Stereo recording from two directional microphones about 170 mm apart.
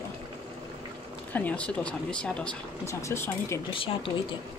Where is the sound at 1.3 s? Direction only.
10° left (ahead or behind).